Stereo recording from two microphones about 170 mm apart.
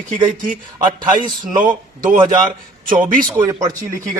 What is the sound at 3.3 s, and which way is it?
Speech, 15° right (ahead or behind).